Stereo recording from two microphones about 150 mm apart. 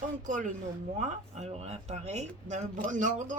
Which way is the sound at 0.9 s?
50° right (ahead or behind).